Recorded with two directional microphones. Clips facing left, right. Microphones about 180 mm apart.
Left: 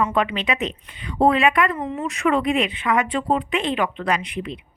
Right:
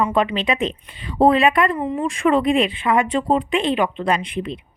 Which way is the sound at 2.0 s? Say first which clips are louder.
Right 3 dB; 30° right (ahead or behind).